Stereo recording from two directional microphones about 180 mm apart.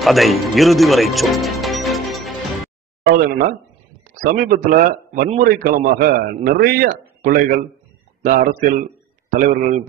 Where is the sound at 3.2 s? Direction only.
55° right (ahead or behind).